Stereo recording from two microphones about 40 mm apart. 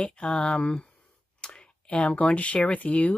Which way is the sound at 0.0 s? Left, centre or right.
Left.